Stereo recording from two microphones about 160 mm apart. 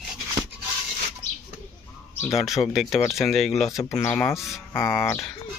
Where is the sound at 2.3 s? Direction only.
Centre (ahead or behind).